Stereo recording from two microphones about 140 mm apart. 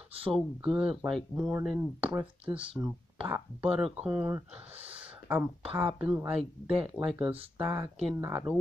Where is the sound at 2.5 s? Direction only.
20° right (ahead or behind).